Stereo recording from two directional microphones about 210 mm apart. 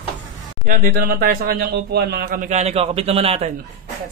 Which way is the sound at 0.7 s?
45° right (ahead or behind).